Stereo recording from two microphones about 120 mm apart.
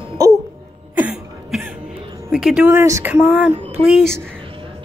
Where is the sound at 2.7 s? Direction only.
25° right (ahead or behind).